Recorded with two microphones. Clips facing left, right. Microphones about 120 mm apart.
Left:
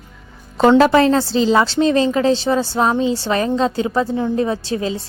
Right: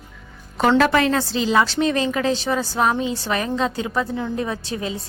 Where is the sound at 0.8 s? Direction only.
30° left (ahead or behind).